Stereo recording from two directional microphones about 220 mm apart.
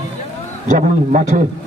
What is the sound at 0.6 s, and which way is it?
Speech, 35° right (ahead or behind).